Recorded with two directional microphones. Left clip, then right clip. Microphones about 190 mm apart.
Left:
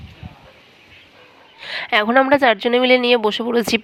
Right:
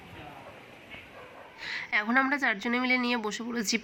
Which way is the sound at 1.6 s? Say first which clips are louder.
Left 11 dB; 55° left (ahead or behind).